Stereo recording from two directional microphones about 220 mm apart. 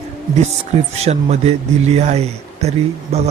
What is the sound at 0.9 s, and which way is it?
Speech, 30° right (ahead or behind).